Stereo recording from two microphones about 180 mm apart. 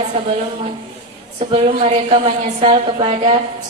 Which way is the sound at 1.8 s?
30° right (ahead or behind).